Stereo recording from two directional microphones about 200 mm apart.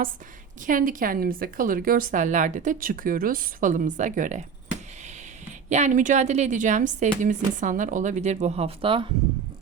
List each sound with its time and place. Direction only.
0.6 s a woman's voice: 40° right (ahead or behind)
5.6 s speech: 35° right (ahead or behind)